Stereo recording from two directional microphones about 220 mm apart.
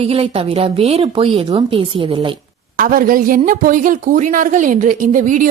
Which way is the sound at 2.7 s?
40° right (ahead or behind).